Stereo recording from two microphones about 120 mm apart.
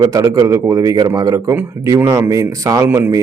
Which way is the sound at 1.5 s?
20° right (ahead or behind).